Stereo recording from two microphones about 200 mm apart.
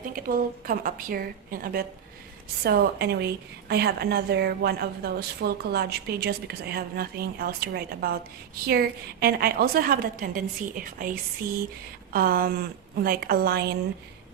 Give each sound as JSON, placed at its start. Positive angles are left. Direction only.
{"t": 0.2, "sound": "a woman's voice", "side_deg": -45}